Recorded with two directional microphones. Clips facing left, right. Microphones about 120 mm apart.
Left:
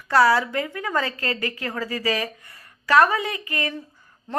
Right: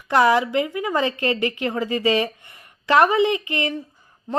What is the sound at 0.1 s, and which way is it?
A woman's voice, 20° right (ahead or behind).